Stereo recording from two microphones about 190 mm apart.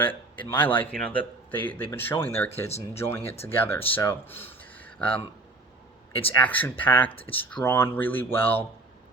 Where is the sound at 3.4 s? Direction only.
10° left (ahead or behind).